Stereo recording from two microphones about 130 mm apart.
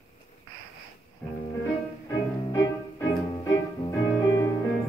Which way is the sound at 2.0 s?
25° left (ahead or behind).